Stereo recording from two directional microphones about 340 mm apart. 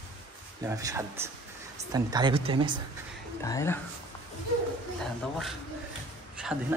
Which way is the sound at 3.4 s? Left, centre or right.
Centre.